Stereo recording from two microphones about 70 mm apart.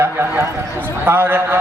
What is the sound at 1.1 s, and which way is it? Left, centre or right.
Speech, right.